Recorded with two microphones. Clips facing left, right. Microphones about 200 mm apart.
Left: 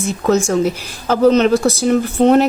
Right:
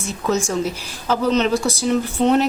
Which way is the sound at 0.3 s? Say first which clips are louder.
Left 6 dB; 50° left (ahead or behind).